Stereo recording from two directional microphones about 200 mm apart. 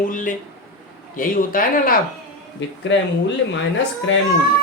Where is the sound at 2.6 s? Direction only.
60° left (ahead or behind).